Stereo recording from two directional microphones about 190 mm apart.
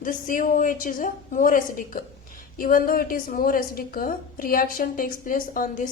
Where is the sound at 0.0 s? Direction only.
45° left (ahead or behind).